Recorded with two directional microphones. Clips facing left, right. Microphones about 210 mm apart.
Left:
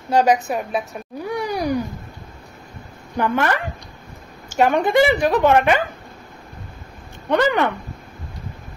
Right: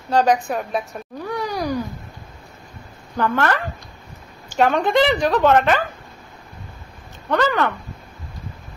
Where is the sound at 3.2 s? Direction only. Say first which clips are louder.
Even; 15° left (ahead or behind).